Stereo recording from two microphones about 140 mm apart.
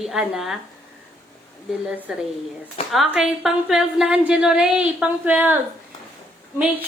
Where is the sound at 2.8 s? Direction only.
45° left (ahead or behind).